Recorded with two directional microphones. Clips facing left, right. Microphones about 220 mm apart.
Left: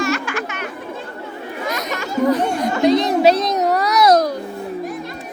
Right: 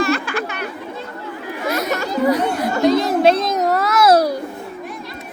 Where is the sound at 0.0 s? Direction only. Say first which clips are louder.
Right 2 dB; 35° right (ahead or behind).